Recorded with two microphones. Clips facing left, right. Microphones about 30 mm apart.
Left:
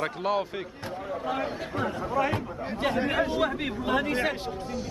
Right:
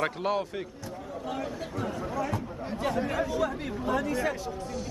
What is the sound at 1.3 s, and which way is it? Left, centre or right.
Speech, left.